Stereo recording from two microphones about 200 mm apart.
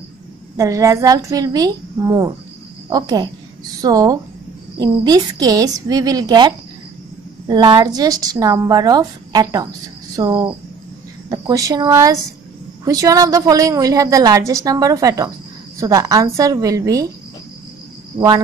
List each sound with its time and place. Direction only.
0.6 s a woman's voice: 15° right (ahead or behind)